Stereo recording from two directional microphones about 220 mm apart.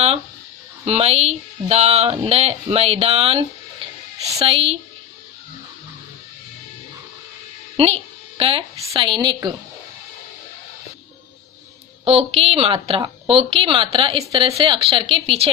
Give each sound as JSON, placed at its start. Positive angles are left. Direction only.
{"t": 0.9, "sound": "a woman's voice", "side_deg": -30}
{"t": 7.8, "sound": "a woman's voice", "side_deg": -25}
{"t": 12.0, "sound": "a woman's voice", "side_deg": -25}